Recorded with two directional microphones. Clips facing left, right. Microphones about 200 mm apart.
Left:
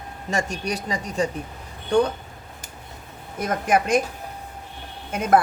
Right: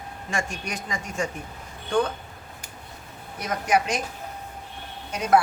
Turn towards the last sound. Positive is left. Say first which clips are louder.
# left 3 dB
turn(degrees=55)  # may be behind; listen again after turning